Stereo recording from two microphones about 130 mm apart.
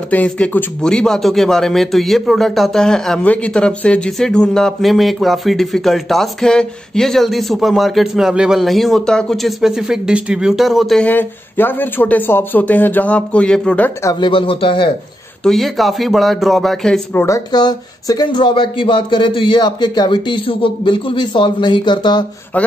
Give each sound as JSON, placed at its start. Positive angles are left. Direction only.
{"t": 0.1, "sound": "a man's voice", "side_deg": 10}
{"t": 11.1, "sound": "speech", "side_deg": 15}
{"t": 14.2, "sound": "speech", "side_deg": 40}
{"t": 15.4, "sound": "a man's voice", "side_deg": 0}
{"t": 17.1, "sound": "speech", "side_deg": 15}
{"t": 17.5, "sound": "speech", "side_deg": 35}